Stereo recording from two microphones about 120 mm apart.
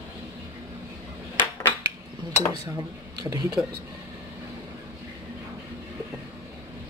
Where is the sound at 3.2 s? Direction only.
35° right (ahead or behind).